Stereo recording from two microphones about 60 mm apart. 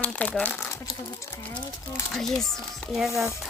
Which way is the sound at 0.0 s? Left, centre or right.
Left.